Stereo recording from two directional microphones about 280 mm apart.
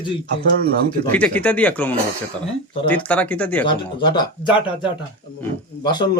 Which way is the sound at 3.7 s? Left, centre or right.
Centre.